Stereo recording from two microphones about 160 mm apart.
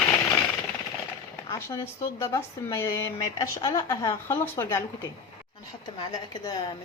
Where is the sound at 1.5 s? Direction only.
15° left (ahead or behind).